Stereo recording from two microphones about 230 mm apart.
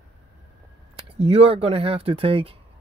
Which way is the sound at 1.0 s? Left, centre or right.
Right.